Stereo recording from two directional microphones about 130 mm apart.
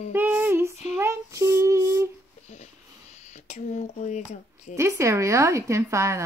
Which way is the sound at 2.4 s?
60° left (ahead or behind).